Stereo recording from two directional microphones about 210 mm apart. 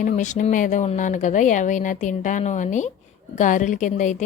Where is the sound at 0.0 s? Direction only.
35° left (ahead or behind).